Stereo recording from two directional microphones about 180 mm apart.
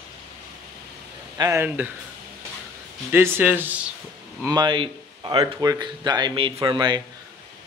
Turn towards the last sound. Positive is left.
turn(degrees=-25)  # may be behind; listen again after turning